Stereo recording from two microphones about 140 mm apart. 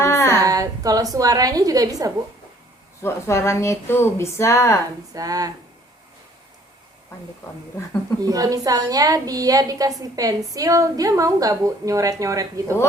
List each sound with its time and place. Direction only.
0.0 s a sound: 20° left (ahead or behind)
0.4 s a woman's voice: 25° right (ahead or behind)
3.0 s speech: 20° left (ahead or behind)
5.1 s a woman's voice: 25° right (ahead or behind)
8.2 s a woman's voice: 25° right (ahead or behind)